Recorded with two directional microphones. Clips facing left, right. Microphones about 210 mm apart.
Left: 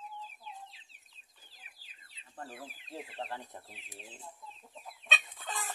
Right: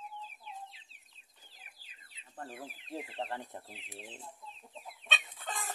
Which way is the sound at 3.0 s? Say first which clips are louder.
Right 1 dB; 25° right (ahead or behind).